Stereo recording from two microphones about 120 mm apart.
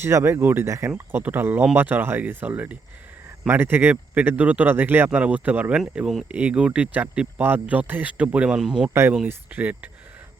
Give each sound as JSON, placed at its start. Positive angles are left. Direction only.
{"t": 0.0, "sound": "speech", "side_deg": -20}
{"t": 8.9, "sound": "speech", "side_deg": -20}